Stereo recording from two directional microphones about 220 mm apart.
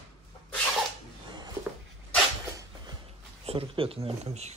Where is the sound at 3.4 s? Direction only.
25° right (ahead or behind).